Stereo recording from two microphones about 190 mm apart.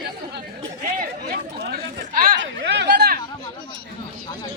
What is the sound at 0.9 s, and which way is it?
Chatter, 45° right (ahead or behind).